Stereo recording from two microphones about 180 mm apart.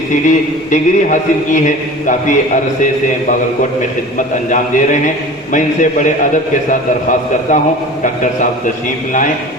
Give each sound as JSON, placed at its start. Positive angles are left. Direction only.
{"t": 0.1, "sound": "a man's voice", "side_deg": 45}
{"t": 4.7, "sound": "a man's voice", "side_deg": 45}